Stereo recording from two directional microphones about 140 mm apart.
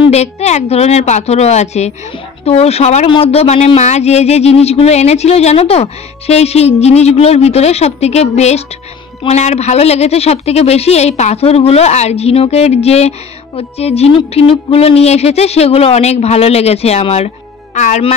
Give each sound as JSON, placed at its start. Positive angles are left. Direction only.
{"t": 0.0, "sound": "speech", "side_deg": 50}